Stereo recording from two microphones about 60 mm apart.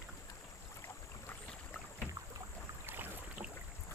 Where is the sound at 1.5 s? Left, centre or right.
Left.